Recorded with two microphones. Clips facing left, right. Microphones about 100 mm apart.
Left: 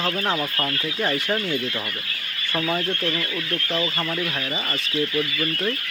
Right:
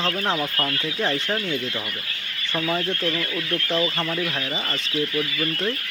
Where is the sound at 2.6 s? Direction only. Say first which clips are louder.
Even; 5° left (ahead or behind).